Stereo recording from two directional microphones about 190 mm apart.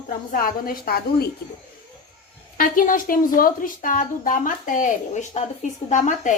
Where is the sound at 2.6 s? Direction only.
45° left (ahead or behind).